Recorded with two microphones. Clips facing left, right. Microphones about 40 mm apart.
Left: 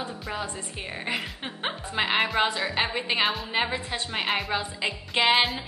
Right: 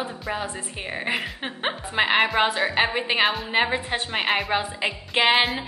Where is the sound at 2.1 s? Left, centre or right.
Centre.